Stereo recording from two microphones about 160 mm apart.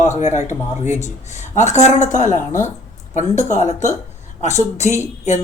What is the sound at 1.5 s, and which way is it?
Speech, 45° left (ahead or behind).